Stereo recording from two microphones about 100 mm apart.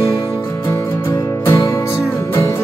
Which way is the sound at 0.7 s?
30° left (ahead or behind).